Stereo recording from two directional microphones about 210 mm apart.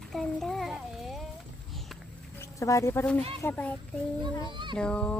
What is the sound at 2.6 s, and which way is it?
A woman's voice, 15° left (ahead or behind).